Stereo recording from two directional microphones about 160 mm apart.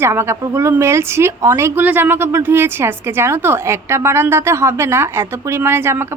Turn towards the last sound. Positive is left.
turn(degrees=-15)  # may be behind; listen again after turning